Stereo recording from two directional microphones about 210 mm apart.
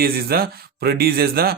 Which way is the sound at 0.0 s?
45° right (ahead or behind).